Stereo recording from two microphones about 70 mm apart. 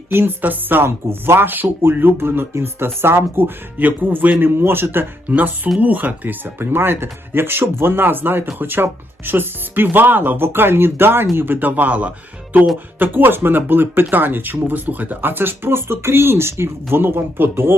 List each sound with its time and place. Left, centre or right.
0.1 s speech: right